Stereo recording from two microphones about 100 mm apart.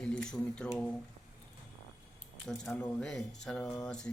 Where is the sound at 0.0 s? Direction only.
5° left (ahead or behind).